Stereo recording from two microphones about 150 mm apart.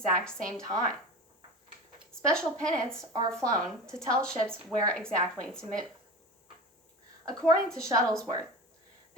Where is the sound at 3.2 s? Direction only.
20° right (ahead or behind).